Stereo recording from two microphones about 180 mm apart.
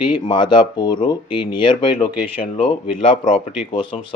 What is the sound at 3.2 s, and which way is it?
Speech, 35° left (ahead or behind).